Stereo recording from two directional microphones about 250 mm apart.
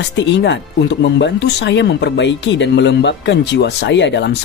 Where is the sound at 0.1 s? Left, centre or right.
Left.